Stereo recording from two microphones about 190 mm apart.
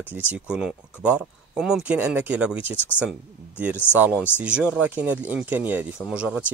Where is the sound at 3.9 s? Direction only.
5° right (ahead or behind).